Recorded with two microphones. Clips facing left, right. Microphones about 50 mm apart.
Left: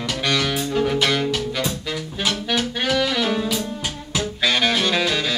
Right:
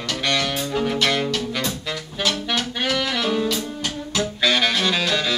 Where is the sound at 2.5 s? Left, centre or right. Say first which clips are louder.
Left 2 dB; centre.